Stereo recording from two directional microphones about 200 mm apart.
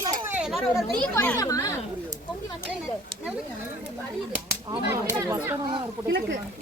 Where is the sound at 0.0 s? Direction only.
15° right (ahead or behind).